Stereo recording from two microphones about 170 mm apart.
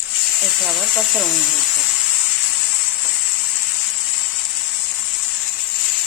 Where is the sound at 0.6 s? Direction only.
Centre (ahead or behind).